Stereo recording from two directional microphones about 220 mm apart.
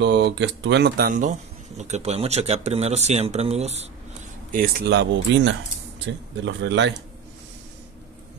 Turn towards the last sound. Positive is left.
turn(degrees=-55)  # may be behind; listen again after turning